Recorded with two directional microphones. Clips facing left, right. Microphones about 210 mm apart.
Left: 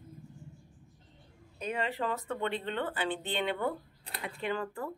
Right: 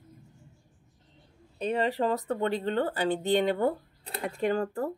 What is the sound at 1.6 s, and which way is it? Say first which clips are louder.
Speech: right 7 dB; 35° right (ahead or behind).